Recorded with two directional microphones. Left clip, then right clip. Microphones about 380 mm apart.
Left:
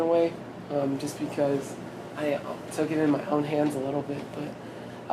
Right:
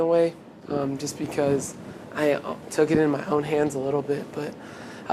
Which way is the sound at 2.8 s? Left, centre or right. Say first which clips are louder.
Right 7 dB; right.